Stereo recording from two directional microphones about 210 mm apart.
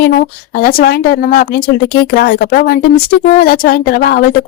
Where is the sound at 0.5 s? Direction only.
45° left (ahead or behind).